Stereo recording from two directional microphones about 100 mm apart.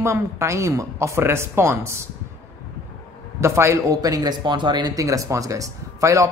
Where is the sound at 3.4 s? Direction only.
30° right (ahead or behind).